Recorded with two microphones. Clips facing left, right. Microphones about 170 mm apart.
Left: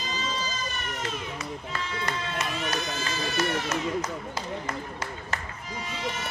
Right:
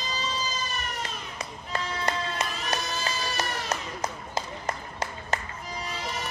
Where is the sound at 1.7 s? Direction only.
35° right (ahead or behind).